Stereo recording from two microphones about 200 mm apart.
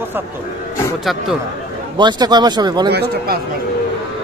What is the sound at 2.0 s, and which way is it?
Speech, 20° right (ahead or behind).